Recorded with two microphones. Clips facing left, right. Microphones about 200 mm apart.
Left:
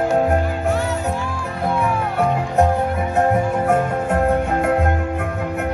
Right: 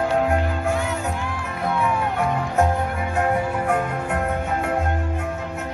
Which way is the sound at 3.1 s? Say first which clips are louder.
Left 4 dB; 40° left (ahead or behind).